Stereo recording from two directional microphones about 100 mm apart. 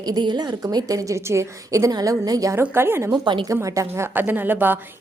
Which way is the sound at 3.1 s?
50° right (ahead or behind).